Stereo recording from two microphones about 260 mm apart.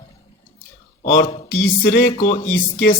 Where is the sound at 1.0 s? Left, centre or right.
Left.